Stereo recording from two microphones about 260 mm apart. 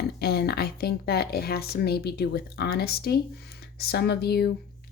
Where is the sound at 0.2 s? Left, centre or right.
Left.